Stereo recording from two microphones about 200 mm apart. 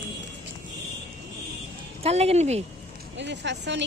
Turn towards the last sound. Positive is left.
turn(degrees=-60)  # may be behind; listen again after turning